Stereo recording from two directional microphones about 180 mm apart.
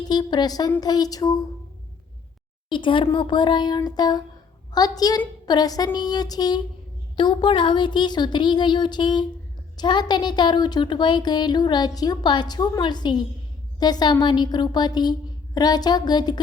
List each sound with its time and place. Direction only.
0.1 s speech: 25° left (ahead or behind)
2.6 s speech: 25° left (ahead or behind)